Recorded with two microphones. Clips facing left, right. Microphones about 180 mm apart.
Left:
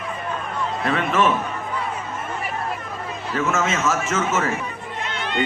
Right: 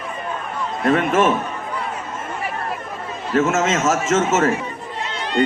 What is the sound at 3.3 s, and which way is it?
A man's voice, 45° right (ahead or behind).